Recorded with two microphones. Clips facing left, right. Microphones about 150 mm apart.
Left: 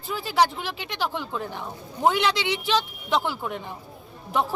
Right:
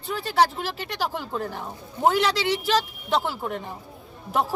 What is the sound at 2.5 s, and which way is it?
A woman's voice, 35° right (ahead or behind).